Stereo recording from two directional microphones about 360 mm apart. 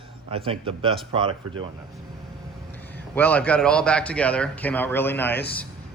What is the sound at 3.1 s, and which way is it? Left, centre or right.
A man's voice, centre.